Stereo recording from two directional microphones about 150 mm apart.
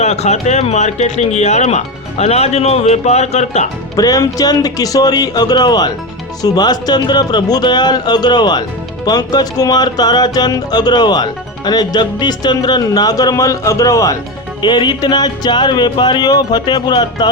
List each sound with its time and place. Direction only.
0.0 s speech: 50° left (ahead or behind)
3.9 s speech: 20° left (ahead or behind)